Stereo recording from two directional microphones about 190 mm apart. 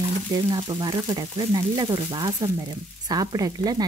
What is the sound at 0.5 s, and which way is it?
Frying, 20° right (ahead or behind).